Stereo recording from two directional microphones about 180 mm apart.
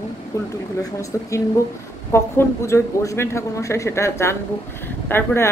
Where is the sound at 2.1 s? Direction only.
15° left (ahead or behind).